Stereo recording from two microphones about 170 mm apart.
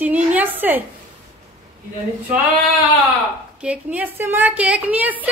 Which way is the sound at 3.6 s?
5° right (ahead or behind).